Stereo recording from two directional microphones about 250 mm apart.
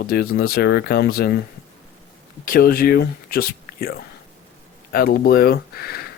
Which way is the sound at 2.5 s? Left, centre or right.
Left.